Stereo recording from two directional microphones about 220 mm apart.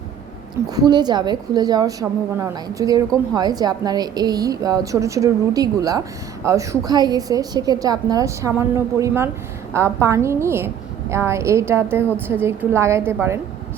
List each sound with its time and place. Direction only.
0.7 s a woman's voice: 20° right (ahead or behind)